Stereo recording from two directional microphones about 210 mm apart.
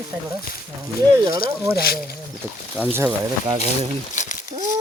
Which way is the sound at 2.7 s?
10° right (ahead or behind).